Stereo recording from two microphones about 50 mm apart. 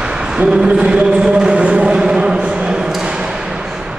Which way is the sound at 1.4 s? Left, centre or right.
Right.